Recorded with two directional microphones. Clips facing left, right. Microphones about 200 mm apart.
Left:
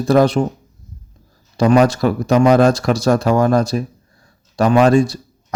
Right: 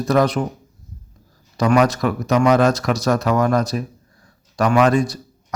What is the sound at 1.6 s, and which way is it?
Speech, 30° left (ahead or behind).